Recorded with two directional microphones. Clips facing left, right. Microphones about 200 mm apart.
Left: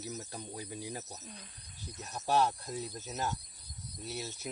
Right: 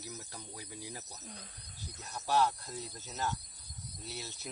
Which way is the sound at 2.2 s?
20° left (ahead or behind).